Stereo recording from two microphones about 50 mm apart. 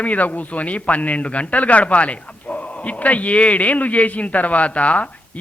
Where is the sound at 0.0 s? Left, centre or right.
Left.